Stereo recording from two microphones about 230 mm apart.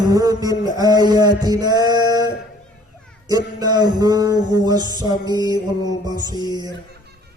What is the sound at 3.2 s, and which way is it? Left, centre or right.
Music, centre.